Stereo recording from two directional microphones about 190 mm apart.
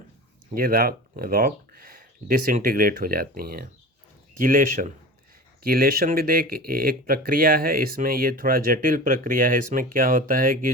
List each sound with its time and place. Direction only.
0.5 s speech: 50° right (ahead or behind)